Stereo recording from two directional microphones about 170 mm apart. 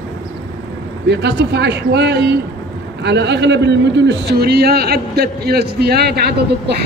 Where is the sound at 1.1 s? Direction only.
85° right.